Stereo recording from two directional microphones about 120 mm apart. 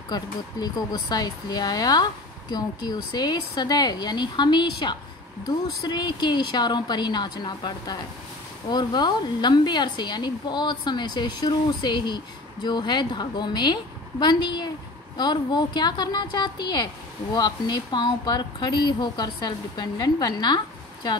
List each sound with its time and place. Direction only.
0.1 s a woman's voice: 35° left (ahead or behind)